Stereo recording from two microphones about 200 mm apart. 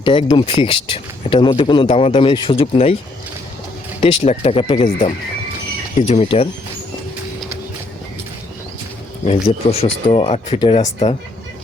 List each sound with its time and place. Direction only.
0.0 s speech: 25° left (ahead or behind)
4.0 s speech: 30° left (ahead or behind)
9.2 s speech: 30° left (ahead or behind)